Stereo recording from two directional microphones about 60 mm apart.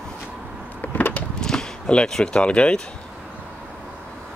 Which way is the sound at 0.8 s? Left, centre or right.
Left.